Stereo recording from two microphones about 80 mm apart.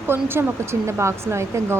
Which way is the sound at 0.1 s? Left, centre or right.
Right.